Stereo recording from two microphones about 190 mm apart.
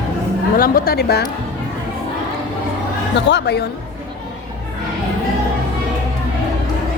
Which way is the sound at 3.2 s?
65° left (ahead or behind).